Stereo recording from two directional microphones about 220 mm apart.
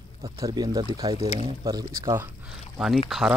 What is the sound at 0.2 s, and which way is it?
Speech, 20° right (ahead or behind).